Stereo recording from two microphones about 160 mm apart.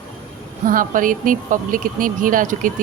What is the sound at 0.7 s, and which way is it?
A woman's voice, 60° right (ahead or behind).